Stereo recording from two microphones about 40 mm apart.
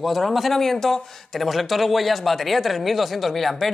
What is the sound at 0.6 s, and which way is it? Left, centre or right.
Speech, centre.